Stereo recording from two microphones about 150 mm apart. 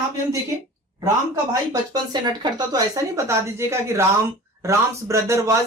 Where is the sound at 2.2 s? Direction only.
30° right (ahead or behind).